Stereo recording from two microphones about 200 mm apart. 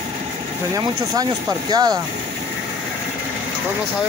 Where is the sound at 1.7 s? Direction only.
20° right (ahead or behind).